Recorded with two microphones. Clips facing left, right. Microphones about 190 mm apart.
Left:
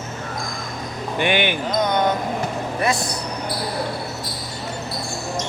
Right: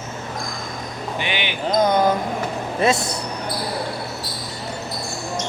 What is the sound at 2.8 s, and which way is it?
Speech, 25° right (ahead or behind).